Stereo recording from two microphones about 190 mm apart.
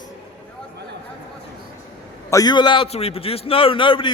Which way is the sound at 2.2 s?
20° left (ahead or behind).